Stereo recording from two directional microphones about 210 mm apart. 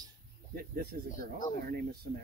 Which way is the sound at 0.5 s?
45° right (ahead or behind).